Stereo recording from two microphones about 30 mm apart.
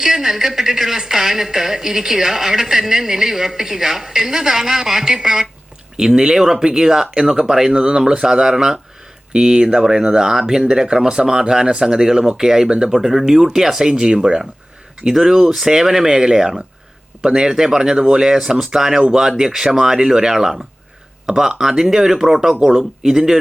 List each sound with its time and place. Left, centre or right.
0.0 s speech: centre
15.0 s speech: centre
17.7 s speech: right